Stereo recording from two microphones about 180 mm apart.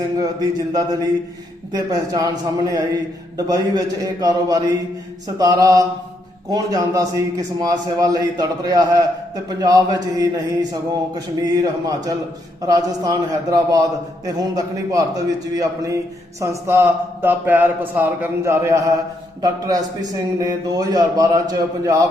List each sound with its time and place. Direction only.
0.2 s a man's voice: 20° right (ahead or behind)